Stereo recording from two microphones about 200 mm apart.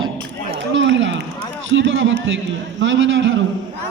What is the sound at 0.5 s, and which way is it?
Run, 65° right (ahead or behind).